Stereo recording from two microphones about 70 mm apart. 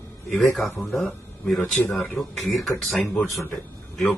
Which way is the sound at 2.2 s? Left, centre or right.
Centre.